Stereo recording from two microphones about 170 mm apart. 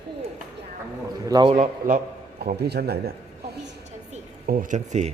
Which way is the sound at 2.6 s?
70° right (ahead or behind).